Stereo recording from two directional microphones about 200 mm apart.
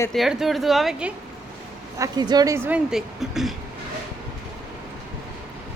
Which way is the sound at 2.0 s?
20° right (ahead or behind).